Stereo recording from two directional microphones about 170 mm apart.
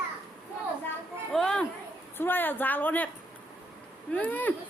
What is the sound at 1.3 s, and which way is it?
Speech, 5° left (ahead or behind).